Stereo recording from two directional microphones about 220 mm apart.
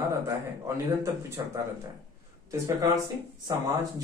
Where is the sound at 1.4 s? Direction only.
15° right (ahead or behind).